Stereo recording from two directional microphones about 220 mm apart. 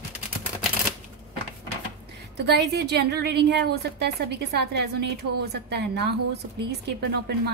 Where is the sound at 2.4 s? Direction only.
50° right (ahead or behind).